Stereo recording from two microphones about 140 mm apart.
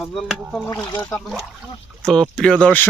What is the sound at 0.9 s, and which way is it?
Speech, 10° left (ahead or behind).